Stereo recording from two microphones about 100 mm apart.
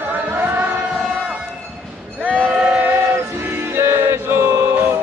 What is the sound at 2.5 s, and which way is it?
Music, 10° right (ahead or behind).